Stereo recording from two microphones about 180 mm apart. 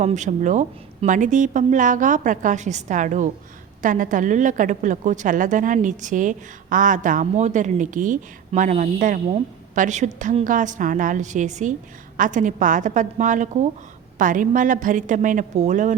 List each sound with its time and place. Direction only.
0.0 s a woman's voice: 40° right (ahead or behind)